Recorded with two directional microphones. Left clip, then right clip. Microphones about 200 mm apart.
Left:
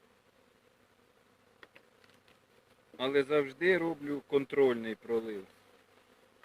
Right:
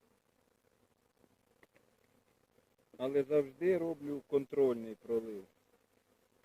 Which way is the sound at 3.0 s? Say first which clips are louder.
Left 3 dB; 25° left (ahead or behind).